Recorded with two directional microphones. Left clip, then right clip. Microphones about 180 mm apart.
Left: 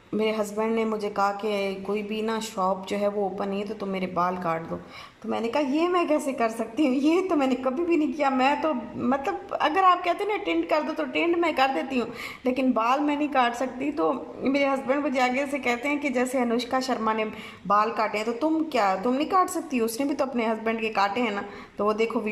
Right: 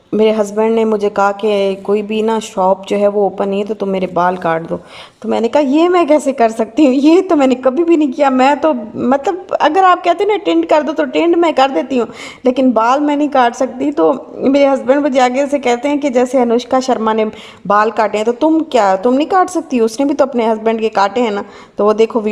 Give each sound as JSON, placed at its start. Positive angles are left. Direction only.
{"t": 0.2, "sound": "a woman's voice", "side_deg": -40}